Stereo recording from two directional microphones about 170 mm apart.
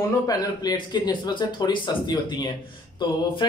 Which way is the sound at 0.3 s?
25° left (ahead or behind).